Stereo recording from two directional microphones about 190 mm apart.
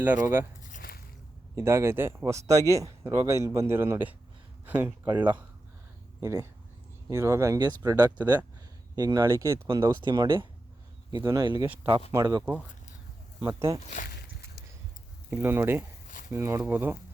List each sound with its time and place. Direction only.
0.0 s speech: 10° right (ahead or behind)
0.7 s chop: 50° left (ahead or behind)
1.5 s speech: 15° right (ahead or behind)
8.2 s speech: 10° right (ahead or behind)
11.7 s speech: 10° right (ahead or behind)
12.1 s speech: 20° right (ahead or behind)
13.9 s a sound: 50° left (ahead or behind)
15.3 s speech: 10° right (ahead or behind)